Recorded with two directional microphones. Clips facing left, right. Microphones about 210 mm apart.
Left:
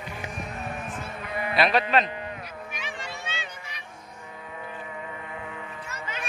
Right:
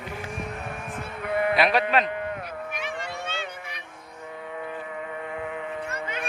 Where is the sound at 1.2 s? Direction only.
60° right (ahead or behind).